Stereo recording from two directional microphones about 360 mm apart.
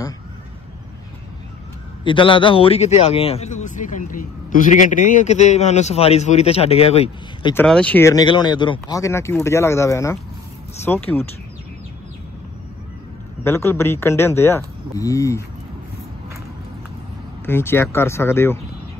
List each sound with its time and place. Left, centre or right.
2.0 s a man's voice: centre
7.5 s a man's voice: centre
13.4 s a man's voice: centre
17.5 s a man's voice: centre